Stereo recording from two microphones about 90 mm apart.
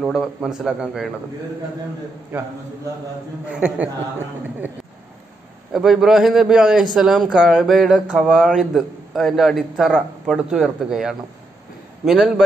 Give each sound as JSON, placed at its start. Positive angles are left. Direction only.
{"t": 0.0, "sound": "a man's voice", "side_deg": -5}
{"t": 2.3, "sound": "a man's voice", "side_deg": -20}
{"t": 5.7, "sound": "a man's voice", "side_deg": -5}